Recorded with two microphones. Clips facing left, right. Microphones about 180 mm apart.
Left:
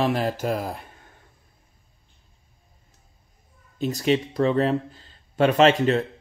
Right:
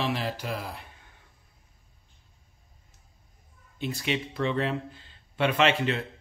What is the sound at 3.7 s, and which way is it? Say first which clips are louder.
Speech: left 8 dB; 40° left (ahead or behind).